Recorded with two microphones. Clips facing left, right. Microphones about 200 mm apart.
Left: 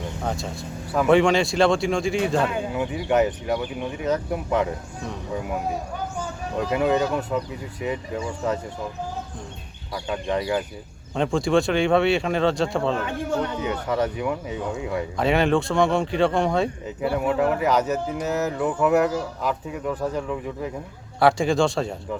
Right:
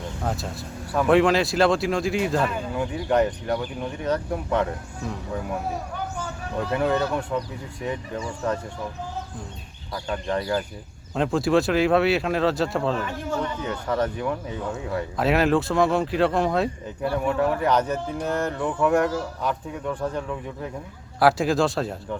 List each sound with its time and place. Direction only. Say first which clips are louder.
0.2 s speech: right 1 dB; centre (ahead or behind)
6.6 s speech: left 2 dB; 10° left (ahead or behind)
9.9 s speech: left 1 dB; 10° left (ahead or behind)
11.1 s speech: even; centre (ahead or behind)
13.3 s a man's voice: left 2 dB; 65° left (ahead or behind)
13.7 s speech: even; 10° left (ahead or behind)
14.7 s speech: left 1 dB; centre (ahead or behind)